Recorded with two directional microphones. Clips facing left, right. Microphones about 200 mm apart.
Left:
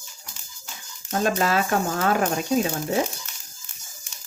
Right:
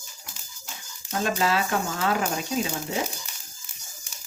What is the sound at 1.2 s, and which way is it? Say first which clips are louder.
A woman's voice: left 2 dB; 50° left (ahead or behind).